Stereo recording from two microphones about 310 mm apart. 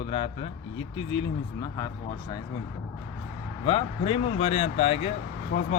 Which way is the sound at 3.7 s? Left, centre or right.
Centre.